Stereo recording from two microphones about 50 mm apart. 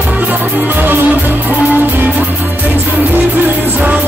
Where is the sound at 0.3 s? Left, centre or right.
Right.